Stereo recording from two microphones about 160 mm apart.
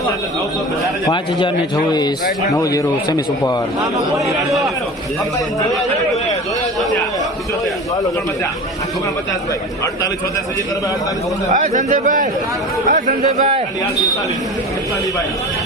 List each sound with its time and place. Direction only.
1.0 s speech: 30° left (ahead or behind)
3.9 s a man's voice: centre (ahead or behind)
11.5 s a man's voice: 50° right (ahead or behind)